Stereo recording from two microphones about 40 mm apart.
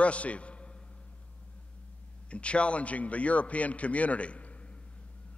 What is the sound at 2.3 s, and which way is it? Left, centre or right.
A man's voice, left.